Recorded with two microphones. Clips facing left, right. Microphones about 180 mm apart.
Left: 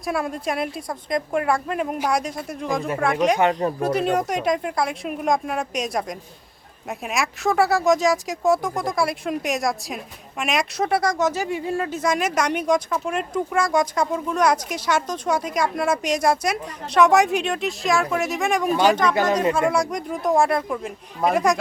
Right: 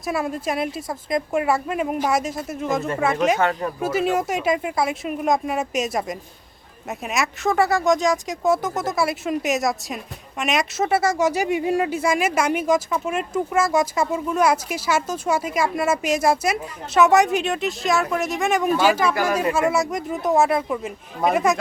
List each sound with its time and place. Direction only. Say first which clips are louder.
0.0 s speech: right 1 dB; centre (ahead or behind)